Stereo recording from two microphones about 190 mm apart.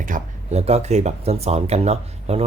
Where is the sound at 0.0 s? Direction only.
40° right (ahead or behind).